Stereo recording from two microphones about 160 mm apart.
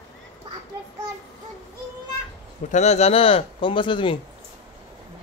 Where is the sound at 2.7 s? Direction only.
40° left (ahead or behind).